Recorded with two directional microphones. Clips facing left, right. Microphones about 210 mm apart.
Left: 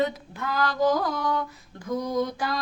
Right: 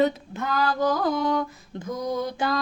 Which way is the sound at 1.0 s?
25° right (ahead or behind).